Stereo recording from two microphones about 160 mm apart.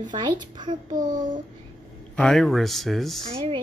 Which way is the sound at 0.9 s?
55° right (ahead or behind).